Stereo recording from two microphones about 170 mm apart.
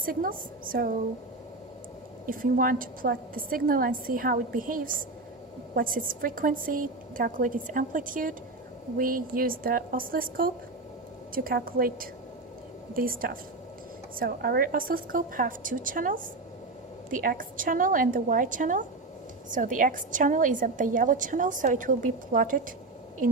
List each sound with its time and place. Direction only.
0.0 s a woman's voice: 55° right (ahead or behind)
2.2 s a woman's voice: 55° right (ahead or behind)